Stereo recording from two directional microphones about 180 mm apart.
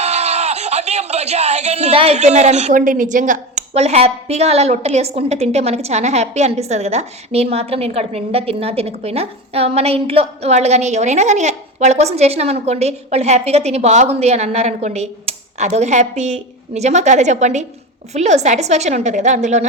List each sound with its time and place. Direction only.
0.0 s speech: 35° right (ahead or behind)